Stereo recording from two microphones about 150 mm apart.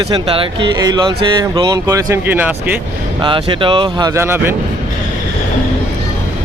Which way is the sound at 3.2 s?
35° right (ahead or behind).